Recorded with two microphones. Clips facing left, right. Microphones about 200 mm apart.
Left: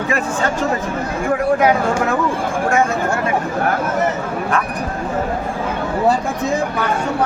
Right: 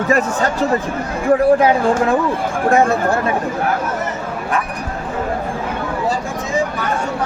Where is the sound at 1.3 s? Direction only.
30° right (ahead or behind).